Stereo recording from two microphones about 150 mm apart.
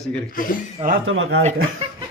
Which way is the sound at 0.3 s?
65° left (ahead or behind).